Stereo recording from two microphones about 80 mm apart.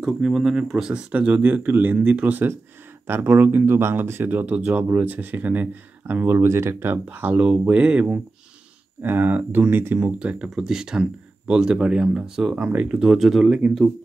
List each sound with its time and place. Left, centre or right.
0.0 s speech: centre
1.1 s speech: centre
9.0 s speech: right
9.9 s speech: centre